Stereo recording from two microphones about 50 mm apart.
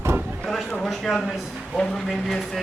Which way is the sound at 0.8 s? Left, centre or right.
Centre.